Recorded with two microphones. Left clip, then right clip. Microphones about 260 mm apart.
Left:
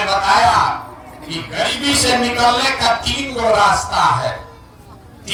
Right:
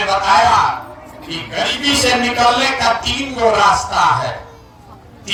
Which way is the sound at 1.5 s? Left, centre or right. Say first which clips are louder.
Right 1 dB; centre.